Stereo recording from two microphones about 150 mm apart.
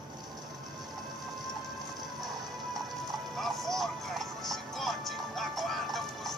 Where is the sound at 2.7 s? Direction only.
Centre (ahead or behind).